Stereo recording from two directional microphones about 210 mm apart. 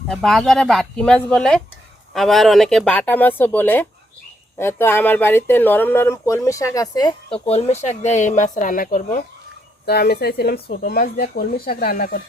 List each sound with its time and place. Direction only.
0.1 s speech: centre (ahead or behind); by 9.2 s 40° left (ahead or behind)
9.8 s speech: 50° left (ahead or behind)